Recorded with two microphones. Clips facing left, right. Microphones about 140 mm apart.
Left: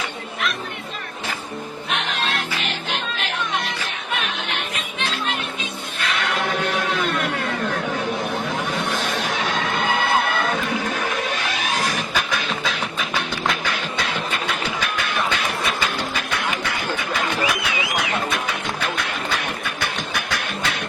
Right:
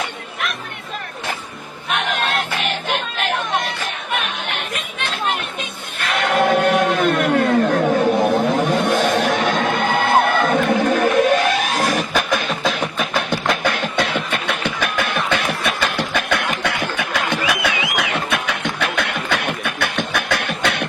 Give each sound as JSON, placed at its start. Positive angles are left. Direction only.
{"t": 1.9, "sound": "music", "side_deg": -55}
{"t": 6.1, "sound": "a sound", "side_deg": -50}
{"t": 9.0, "sound": "music", "side_deg": -60}
{"t": 17.9, "sound": "beatboxing", "side_deg": -70}